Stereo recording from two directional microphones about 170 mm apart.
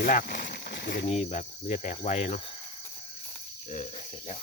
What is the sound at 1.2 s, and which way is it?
Cricket, 45° left (ahead or behind).